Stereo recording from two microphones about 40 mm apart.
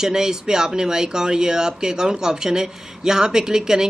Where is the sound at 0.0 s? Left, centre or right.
Centre.